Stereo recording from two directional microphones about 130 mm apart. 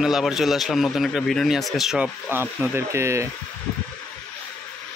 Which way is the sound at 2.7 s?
20° right (ahead or behind).